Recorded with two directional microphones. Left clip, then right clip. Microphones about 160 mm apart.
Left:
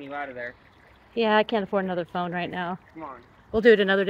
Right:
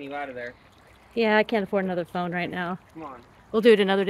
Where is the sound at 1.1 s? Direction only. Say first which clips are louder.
Even; 10° right (ahead or behind).